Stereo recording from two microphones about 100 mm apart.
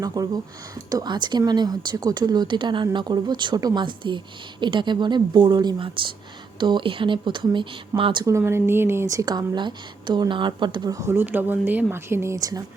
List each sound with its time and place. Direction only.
0.0 s speech: 40° right (ahead or behind); by 8.3 s 55° right (ahead or behind)
8.3 s speech: 25° right (ahead or behind)
9.6 s speech: 50° right (ahead or behind)
11.1 s speech: 20° right (ahead or behind)
12.4 s speech: 40° right (ahead or behind)